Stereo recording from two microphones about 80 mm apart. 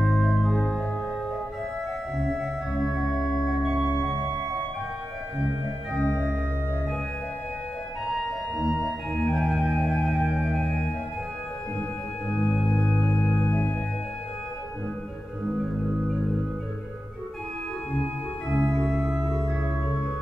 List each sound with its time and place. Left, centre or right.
0.1 s organ: centre
2.1 s organ: centre
2.9 s music: centre
8.7 s organ: centre
9.8 s music: centre
12.7 s music: centre
18.5 s organ: centre